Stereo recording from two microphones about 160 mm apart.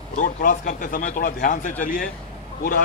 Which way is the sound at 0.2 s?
60° left (ahead or behind).